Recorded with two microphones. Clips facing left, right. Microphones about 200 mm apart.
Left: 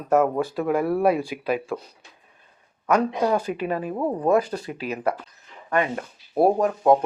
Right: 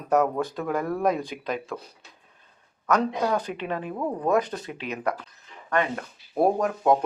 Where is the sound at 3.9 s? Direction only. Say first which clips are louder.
Left 4 dB; 20° left (ahead or behind).